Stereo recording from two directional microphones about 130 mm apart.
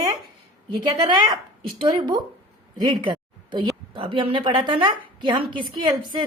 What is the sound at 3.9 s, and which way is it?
A woman's voice, 40° right (ahead or behind).